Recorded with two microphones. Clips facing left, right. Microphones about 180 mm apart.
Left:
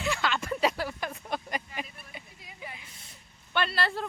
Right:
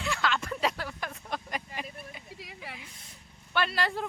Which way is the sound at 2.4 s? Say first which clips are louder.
Even; 90° right.